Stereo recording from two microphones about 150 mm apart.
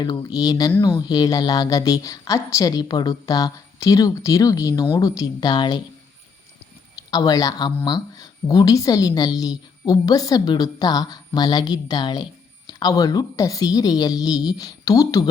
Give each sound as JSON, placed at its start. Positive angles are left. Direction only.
{"t": 0.0, "sound": "a woman's voice", "side_deg": 25}
{"t": 7.1, "sound": "a woman's voice", "side_deg": 25}